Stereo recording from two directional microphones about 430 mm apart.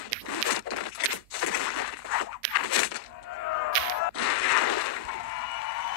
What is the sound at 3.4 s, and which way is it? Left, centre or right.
Whip, left.